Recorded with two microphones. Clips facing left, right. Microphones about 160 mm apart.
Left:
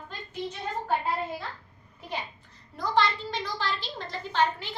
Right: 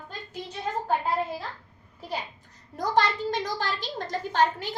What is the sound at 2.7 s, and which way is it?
A woman's voice, 45° right (ahead or behind).